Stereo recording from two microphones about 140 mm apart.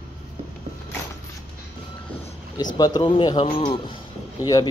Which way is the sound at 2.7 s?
30° left (ahead or behind).